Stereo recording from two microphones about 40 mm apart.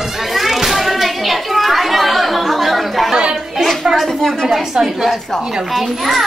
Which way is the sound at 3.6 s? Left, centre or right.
Centre.